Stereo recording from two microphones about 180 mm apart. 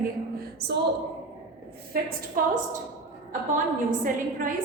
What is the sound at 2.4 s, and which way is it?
Speech, 50° right (ahead or behind).